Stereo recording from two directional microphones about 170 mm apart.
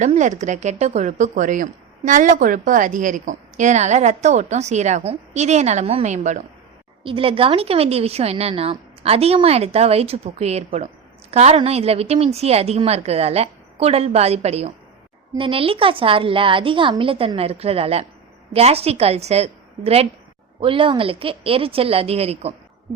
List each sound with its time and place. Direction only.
0.0 s a woman's voice: 45° right (ahead or behind)
7.0 s a woman's voice: 30° right (ahead or behind)